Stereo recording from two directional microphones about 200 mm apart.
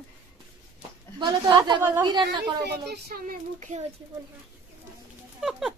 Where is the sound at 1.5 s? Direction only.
10° right (ahead or behind).